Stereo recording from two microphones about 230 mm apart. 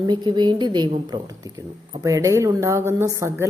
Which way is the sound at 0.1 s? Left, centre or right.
Centre.